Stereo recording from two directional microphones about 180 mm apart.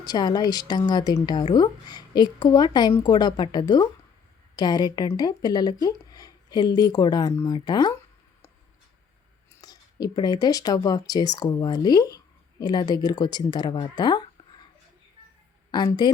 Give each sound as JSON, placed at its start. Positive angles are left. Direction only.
{"t": 0.0, "sound": "a woman's voice", "side_deg": 20}
{"t": 9.6, "sound": "speech", "side_deg": 20}
{"t": 15.7, "sound": "a woman's voice", "side_deg": 25}